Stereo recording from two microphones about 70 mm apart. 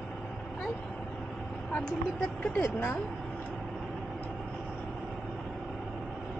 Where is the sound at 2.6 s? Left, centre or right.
Left.